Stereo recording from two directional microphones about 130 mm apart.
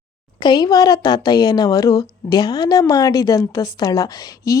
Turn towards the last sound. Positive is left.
turn(degrees=30)  # may be behind; listen again after turning